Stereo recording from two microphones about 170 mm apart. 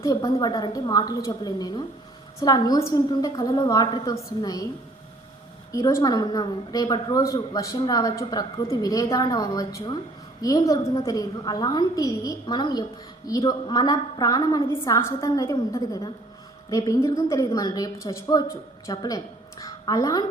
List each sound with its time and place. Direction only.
0.0 s a woman's voice: 20° left (ahead or behind)
5.7 s a woman's voice: 20° left (ahead or behind)